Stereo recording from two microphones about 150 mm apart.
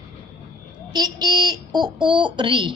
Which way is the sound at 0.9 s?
25° right (ahead or behind).